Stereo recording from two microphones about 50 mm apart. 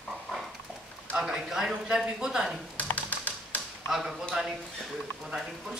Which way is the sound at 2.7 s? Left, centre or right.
Left.